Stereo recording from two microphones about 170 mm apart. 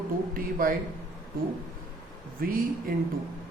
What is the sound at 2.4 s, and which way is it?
Speech, 60° right (ahead or behind).